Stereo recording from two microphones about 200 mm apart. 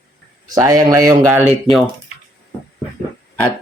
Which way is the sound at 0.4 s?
20° right (ahead or behind).